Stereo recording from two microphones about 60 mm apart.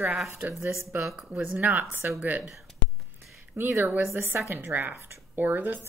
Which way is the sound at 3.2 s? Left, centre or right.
Right.